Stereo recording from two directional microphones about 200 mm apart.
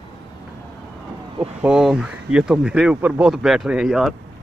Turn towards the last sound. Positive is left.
turn(degrees=0)  # may be behind; listen again after turning